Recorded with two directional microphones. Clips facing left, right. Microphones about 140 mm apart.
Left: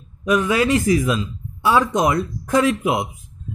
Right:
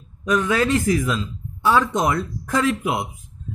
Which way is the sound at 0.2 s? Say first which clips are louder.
Left 2 dB; 10° left (ahead or behind).